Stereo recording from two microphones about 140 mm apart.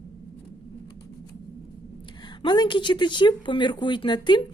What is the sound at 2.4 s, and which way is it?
Speech, 35° left (ahead or behind).